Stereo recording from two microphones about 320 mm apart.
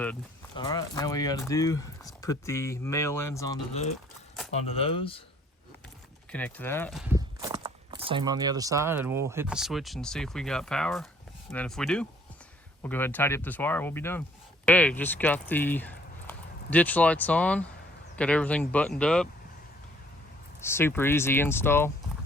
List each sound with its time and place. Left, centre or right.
0.5 s speech: centre
6.3 s speech: centre
20.6 s speech: centre